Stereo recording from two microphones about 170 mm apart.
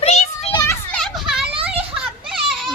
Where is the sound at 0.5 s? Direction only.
15° left (ahead or behind).